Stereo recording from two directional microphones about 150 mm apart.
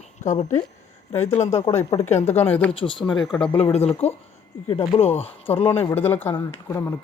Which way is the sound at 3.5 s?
40° left (ahead or behind).